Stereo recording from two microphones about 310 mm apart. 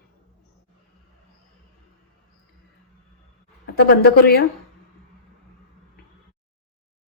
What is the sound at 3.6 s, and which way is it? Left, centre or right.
Speech, left.